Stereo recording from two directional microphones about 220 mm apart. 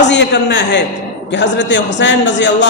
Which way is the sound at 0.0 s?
50° left (ahead or behind).